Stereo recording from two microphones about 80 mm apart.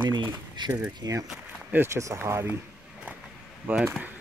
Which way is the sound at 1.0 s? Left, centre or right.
Right.